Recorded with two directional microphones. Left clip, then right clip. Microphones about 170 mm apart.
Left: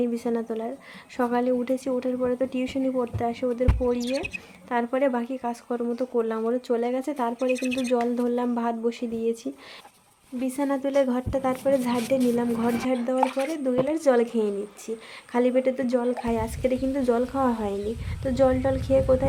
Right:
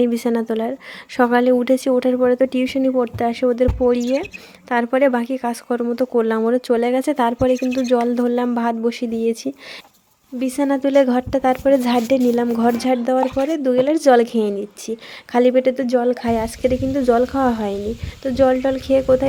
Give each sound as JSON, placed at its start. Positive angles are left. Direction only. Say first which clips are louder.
{"t": 0.0, "sound": "a woman's voice", "louder": "right 8 dB", "side_deg": -45}